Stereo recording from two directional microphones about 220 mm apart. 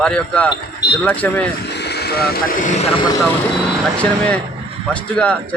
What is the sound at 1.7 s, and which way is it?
Speech, 50° left (ahead or behind).